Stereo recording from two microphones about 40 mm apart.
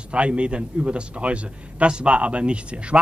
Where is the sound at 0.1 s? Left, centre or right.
Right.